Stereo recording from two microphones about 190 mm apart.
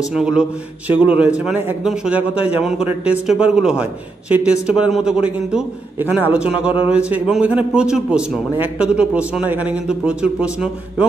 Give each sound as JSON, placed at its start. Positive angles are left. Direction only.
{"t": 0.0, "sound": "a man's voice", "side_deg": -5}